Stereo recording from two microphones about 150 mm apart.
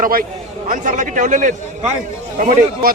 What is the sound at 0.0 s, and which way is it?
Speech, 75° right (ahead or behind).